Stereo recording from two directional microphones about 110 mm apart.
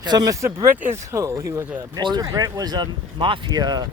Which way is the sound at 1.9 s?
40° right (ahead or behind).